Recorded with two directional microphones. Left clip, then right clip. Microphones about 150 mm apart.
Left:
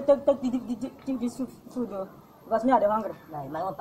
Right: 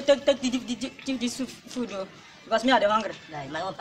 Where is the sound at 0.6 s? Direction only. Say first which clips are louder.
Right 2 dB; 20° left (ahead or behind).